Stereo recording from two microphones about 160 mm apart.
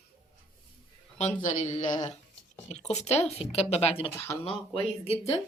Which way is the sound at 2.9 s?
45° left (ahead or behind).